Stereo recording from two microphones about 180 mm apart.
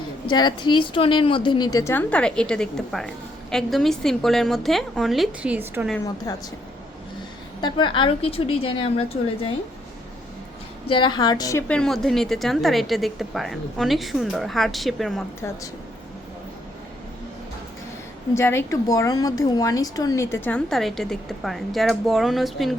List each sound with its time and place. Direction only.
0.3 s a woman's voice: 25° left (ahead or behind); by 5.9 s 10° right (ahead or behind)
6.3 s speech: 20° left (ahead or behind)
7.6 s a woman's voice: 25° left (ahead or behind)
10.8 s a woman's voice: 25° left (ahead or behind)
11.7 s a woman's voice: 5° left (ahead or behind)
15.4 s speech: 15° left (ahead or behind)
18.3 s speech: 15° left (ahead or behind); by 22.7 s centre (ahead or behind)